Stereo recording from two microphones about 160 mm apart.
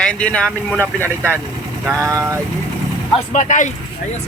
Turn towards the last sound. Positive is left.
turn(degrees=50)  # may be behind; listen again after turning